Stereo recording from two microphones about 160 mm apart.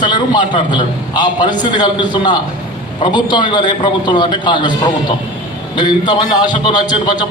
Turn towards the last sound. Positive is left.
turn(degrees=25)  # may be behind; listen again after turning